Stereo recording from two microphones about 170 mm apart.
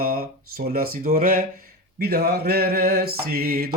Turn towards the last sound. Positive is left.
turn(degrees=-65)  # may be behind; listen again after turning